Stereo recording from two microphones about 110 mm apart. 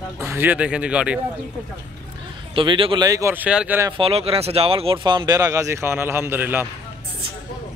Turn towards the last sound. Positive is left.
turn(degrees=-20)  # may be behind; listen again after turning